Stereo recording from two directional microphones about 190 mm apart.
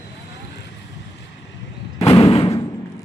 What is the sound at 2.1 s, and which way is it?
Thump, 25° left (ahead or behind).